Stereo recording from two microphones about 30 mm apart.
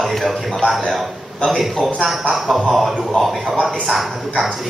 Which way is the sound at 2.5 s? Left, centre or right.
Left.